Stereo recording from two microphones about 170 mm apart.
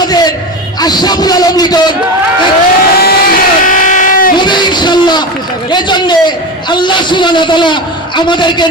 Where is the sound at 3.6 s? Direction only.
50° left (ahead or behind).